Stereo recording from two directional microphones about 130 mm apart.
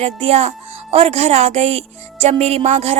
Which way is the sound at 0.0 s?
50° right (ahead or behind).